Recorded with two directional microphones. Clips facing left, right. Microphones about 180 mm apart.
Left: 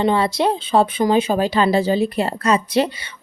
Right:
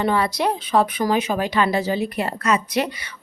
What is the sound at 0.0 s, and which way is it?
Speech, 25° left (ahead or behind).